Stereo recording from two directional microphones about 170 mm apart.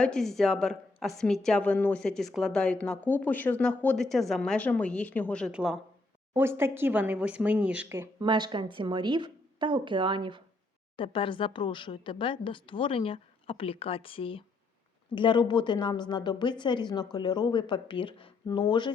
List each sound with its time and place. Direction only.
0.0 s a woman's voice: 5° left (ahead or behind)
5.5 s a woman's voice: 5° right (ahead or behind)
8.2 s speech: 25° right (ahead or behind)
10.9 s a woman's voice: 30° left (ahead or behind)